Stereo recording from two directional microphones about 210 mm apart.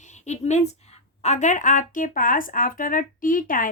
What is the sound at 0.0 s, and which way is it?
A woman's voice, 35° left (ahead or behind).